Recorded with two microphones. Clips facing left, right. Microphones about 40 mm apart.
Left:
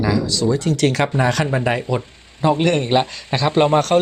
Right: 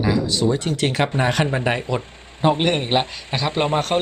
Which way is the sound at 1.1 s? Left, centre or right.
Right.